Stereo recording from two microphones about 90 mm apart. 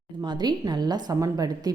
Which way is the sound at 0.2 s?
55° right (ahead or behind).